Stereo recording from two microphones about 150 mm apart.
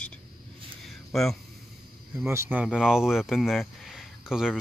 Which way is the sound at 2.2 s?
15° right (ahead or behind).